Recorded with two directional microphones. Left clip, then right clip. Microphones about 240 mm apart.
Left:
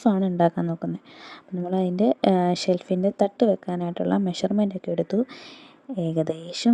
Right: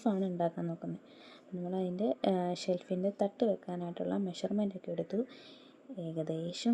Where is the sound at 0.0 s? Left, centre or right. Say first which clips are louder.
Left 12 dB; left.